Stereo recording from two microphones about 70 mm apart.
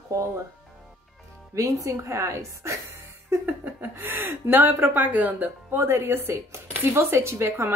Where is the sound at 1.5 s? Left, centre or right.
Right.